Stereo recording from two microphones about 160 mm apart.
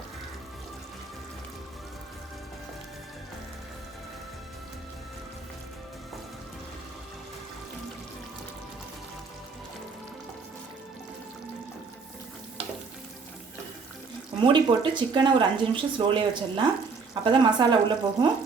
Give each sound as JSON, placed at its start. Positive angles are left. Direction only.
{"t": 14.3, "sound": "speech", "side_deg": -30}